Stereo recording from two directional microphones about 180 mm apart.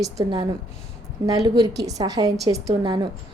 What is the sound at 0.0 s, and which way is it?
A woman's voice, 20° right (ahead or behind).